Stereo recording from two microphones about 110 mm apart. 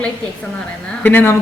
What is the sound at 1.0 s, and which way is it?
Speech, 15° left (ahead or behind).